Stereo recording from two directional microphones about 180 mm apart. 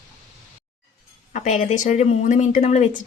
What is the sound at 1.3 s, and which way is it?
Speech, 45° left (ahead or behind).